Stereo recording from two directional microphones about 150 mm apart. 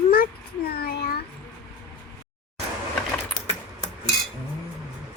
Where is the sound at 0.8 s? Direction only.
85° left.